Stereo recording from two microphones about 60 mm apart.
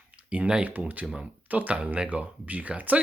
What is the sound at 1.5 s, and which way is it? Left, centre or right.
Speech, right.